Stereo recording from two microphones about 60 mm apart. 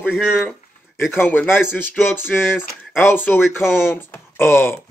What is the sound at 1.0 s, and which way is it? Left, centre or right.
Speech, left.